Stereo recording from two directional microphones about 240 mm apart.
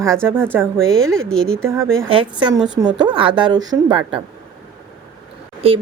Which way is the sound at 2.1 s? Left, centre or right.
Right.